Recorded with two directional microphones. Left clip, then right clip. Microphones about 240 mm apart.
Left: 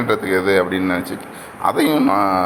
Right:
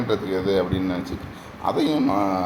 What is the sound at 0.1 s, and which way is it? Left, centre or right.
A man's voice, centre.